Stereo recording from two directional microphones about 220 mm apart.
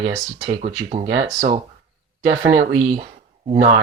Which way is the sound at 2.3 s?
20° right (ahead or behind).